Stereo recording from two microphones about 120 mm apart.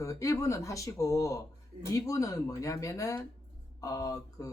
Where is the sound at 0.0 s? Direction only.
25° left (ahead or behind).